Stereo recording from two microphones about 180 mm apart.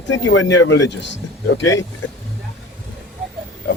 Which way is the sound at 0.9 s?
80° left.